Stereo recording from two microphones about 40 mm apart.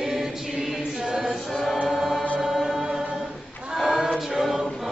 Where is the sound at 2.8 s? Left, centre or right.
Centre.